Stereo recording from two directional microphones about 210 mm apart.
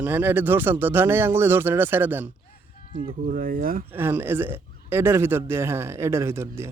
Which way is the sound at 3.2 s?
40° right (ahead or behind).